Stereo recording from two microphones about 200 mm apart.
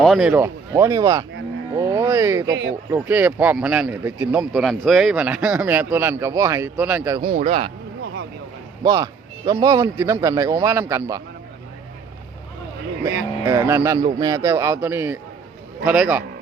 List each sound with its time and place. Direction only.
0.0 s speech: centre (ahead or behind); by 1.2 s 20° right (ahead or behind)
1.7 s a sound: 15° right (ahead or behind)
2.9 s speech: 10° right (ahead or behind)
7.2 s speech: 30° right (ahead or behind)
8.8 s speech: 20° right (ahead or behind)
13.4 s speech: 15° right (ahead or behind)